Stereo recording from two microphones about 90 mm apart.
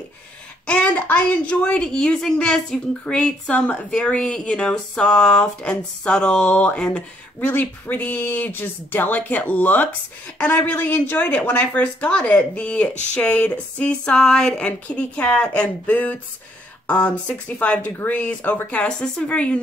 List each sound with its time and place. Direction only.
0.7 s a woman's voice: 20° left (ahead or behind)